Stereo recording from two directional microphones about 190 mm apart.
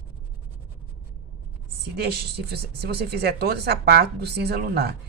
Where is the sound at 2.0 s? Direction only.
55° right (ahead or behind).